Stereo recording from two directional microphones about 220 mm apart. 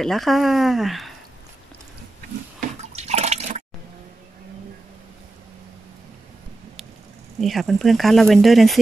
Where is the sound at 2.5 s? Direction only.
30° right (ahead or behind).